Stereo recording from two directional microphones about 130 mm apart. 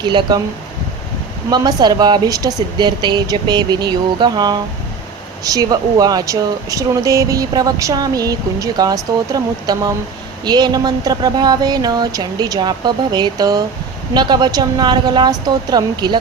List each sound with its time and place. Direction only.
0.0 s speech: 35° right (ahead or behind)
1.5 s speech: 30° right (ahead or behind)